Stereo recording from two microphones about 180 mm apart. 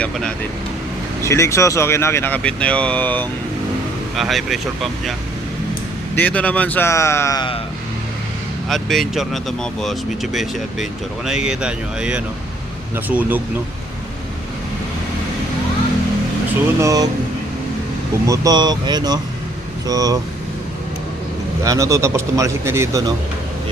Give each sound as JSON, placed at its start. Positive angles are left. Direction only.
{"t": 0.0, "sound": "speech", "side_deg": 5}
{"t": 6.1, "sound": "speech", "side_deg": 10}
{"t": 8.7, "sound": "a man's voice", "side_deg": 0}
{"t": 16.8, "sound": "speech", "side_deg": -20}
{"t": 18.3, "sound": "speech", "side_deg": -20}
{"t": 21.6, "sound": "a man's voice", "side_deg": -15}